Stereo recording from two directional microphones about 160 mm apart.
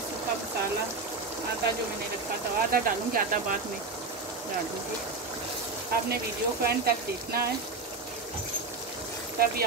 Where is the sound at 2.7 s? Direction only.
65° right (ahead or behind).